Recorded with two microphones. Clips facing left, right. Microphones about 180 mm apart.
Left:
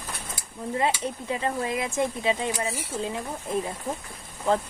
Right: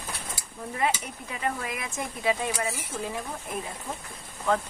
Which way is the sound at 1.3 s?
25° left (ahead or behind).